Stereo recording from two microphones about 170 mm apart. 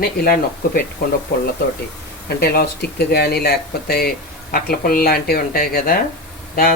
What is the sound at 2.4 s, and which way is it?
Speech, 65° left (ahead or behind).